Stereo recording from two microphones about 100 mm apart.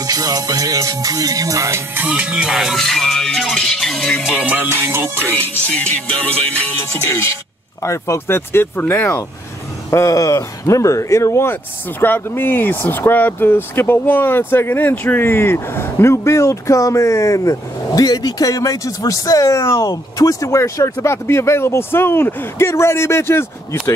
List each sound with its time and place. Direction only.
0.0 s music: 40° right (ahead or behind)
2.0 s music: 15° right (ahead or behind)
4.6 s music: 25° right (ahead or behind)
7.8 s speech: 30° left (ahead or behind)